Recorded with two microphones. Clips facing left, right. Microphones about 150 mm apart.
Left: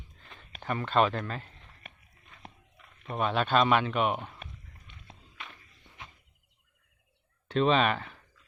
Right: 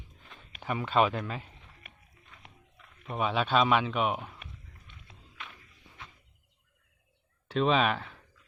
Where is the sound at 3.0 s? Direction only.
Centre (ahead or behind).